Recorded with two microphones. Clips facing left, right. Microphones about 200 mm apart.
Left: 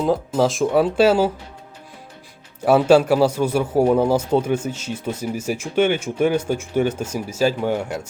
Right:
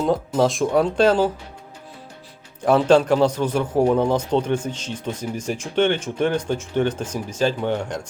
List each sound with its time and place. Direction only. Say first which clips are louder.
0.0 s speech: left 1 dB; centre (ahead or behind)
2.6 s a man's voice: left 2 dB; 10° left (ahead or behind)